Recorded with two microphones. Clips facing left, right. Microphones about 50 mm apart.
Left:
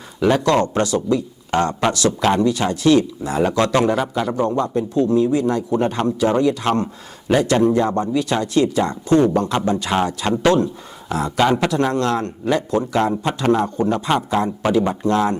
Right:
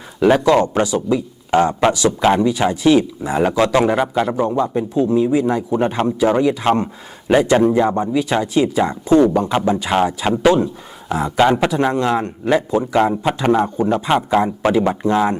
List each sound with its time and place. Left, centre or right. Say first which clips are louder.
0.2 s speech: right 3 dB; centre